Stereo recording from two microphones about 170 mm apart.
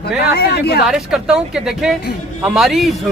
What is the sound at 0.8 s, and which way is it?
Speech, 5° right (ahead or behind).